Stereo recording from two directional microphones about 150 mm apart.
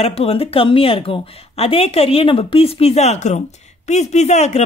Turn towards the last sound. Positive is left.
turn(degrees=50)  # may be behind; listen again after turning